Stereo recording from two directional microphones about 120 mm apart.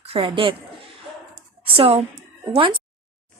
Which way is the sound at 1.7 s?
50° right (ahead or behind).